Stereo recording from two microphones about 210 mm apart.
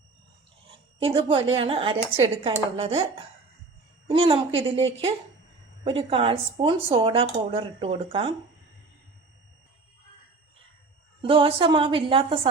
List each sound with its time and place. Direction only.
0.9 s speech: 25° right (ahead or behind)
4.1 s speech: 25° right (ahead or behind)
11.2 s speech: 25° right (ahead or behind)